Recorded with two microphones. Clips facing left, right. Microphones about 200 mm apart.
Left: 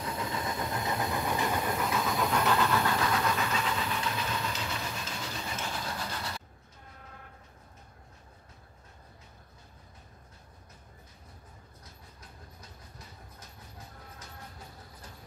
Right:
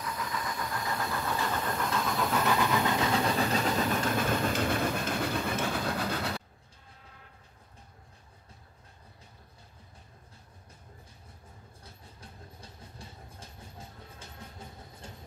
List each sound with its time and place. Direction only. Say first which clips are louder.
0.0 s vehicle: left 2 dB; 25° left (ahead or behind); by 6.4 s 60° right (ahead or behind)
11.8 s train: right 4 dB; 30° right (ahead or behind)